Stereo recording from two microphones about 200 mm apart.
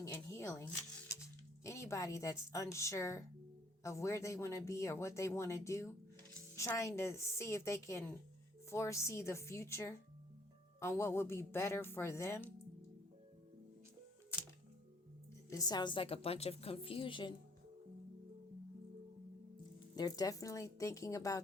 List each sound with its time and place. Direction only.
0.0 s a sound: 15° left (ahead or behind)
1.6 s speech: 15° left (ahead or behind)
15.4 s a woman's voice: 15° left (ahead or behind)
20.0 s speech: 20° left (ahead or behind)